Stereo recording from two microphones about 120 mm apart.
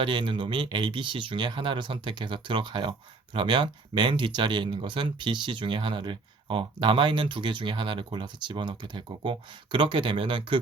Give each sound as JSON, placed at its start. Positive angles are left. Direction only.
{"t": 0.0, "sound": "speech", "side_deg": -45}